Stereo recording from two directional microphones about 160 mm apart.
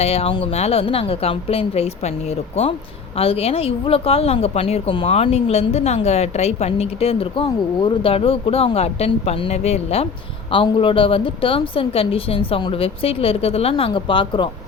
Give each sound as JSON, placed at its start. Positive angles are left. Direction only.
{"t": 0.0, "sound": "a woman's voice", "side_deg": 40}